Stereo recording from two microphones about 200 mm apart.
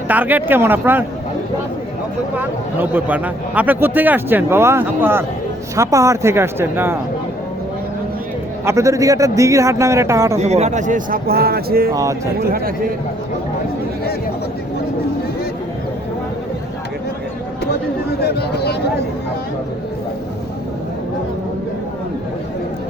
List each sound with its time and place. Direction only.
0.1 s speech: 10° right (ahead or behind)
2.4 s speech: 10° right (ahead or behind)
8.6 s speech: 15° right (ahead or behind)
10.3 s a man's voice: 35° right (ahead or behind); by 11.9 s 50° right (ahead or behind)
11.9 s speech: 15° right (ahead or behind)
12.4 s speech: 50° right (ahead or behind)
18.2 s speech: 55° left (ahead or behind)